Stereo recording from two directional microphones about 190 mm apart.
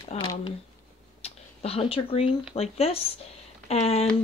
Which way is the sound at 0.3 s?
25° left (ahead or behind).